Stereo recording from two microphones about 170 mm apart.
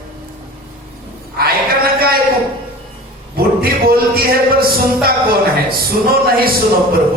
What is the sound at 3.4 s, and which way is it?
Speech, 65° right (ahead or behind).